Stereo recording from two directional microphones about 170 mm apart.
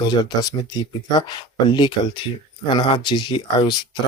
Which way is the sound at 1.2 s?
25° left (ahead or behind).